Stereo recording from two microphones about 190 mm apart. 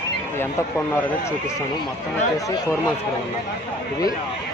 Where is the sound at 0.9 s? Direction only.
10° left (ahead or behind).